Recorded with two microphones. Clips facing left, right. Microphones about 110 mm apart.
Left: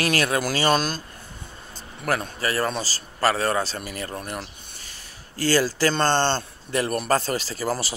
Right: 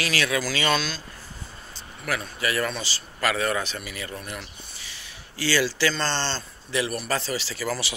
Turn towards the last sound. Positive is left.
turn(degrees=40)  # may be behind; listen again after turning